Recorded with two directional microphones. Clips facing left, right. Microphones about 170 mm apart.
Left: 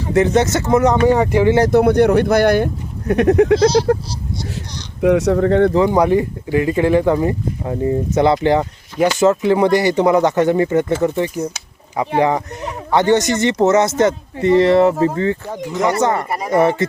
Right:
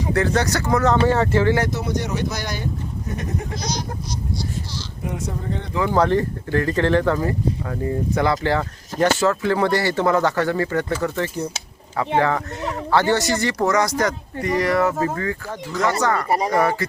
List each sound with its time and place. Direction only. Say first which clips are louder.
0.1 s speech: left 7 dB; 20° left (ahead or behind)
1.7 s speech: left 13 dB; 60° left (ahead or behind)
3.1 s speech: left 18 dB; 75° left (ahead or behind); by 3.7 s 90° left
5.0 s speech: left 15 dB; 85° left; by 5.7 s 70° left (ahead or behind)
5.8 s speech: left 4 dB; 15° left (ahead or behind)